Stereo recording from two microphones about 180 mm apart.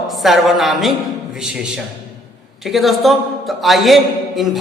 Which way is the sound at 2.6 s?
Centre (ahead or behind).